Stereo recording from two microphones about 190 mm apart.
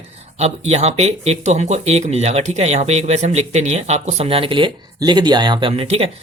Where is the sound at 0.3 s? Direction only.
35° right (ahead or behind).